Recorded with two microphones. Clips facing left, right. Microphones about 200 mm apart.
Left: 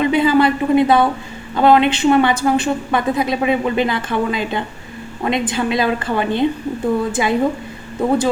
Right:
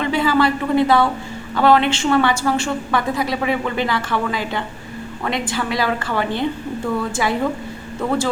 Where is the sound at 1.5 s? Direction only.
20° left (ahead or behind).